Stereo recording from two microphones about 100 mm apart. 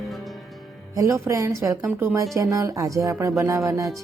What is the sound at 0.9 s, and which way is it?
Speech, 30° right (ahead or behind).